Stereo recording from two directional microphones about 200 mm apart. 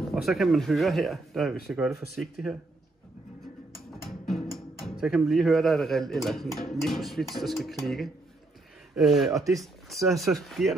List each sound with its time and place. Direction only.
0.1 s speech: centre (ahead or behind)
4.4 s speech: centre (ahead or behind)
9.3 s speech: 15° right (ahead or behind)
9.6 s speech: centre (ahead or behind)